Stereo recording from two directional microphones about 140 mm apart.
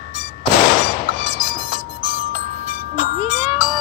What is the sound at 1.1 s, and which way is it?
Music, 60° right (ahead or behind).